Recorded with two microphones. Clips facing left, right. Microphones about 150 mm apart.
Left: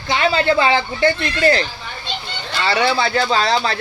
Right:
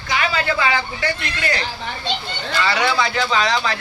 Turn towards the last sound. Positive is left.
turn(degrees=35)  # may be behind; listen again after turning